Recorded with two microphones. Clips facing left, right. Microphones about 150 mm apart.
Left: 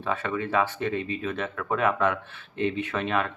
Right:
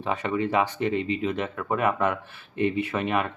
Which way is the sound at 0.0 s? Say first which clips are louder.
Right 2 dB; 15° right (ahead or behind).